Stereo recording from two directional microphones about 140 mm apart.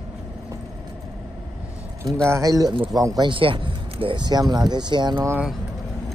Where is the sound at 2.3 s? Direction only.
25° right (ahead or behind).